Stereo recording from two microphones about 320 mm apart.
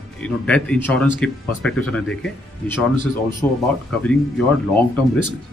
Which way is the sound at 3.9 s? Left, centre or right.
Centre.